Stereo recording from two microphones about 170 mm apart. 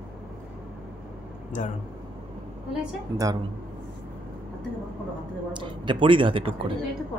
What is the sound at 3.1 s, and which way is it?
Speech, 20° right (ahead or behind).